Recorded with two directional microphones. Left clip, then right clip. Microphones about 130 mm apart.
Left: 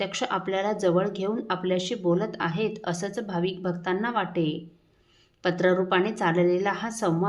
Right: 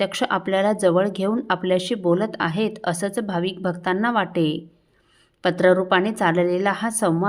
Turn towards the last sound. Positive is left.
turn(degrees=-40)  # may be behind; listen again after turning